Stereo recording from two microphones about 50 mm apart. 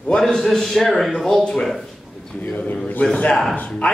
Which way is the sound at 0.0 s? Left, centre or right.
Centre.